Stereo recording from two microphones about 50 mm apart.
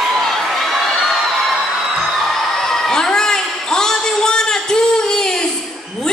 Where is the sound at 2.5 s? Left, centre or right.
Centre.